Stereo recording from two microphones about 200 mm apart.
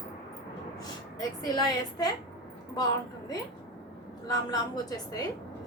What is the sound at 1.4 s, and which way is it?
Speech, 20° left (ahead or behind).